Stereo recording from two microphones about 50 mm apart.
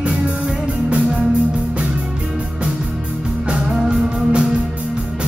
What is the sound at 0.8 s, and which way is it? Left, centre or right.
Music, right.